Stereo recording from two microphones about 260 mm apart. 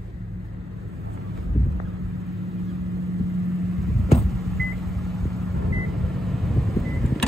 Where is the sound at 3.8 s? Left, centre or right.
Centre.